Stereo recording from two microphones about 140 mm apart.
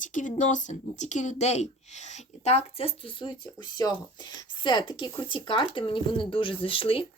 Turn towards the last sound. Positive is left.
turn(degrees=40)  # may be behind; listen again after turning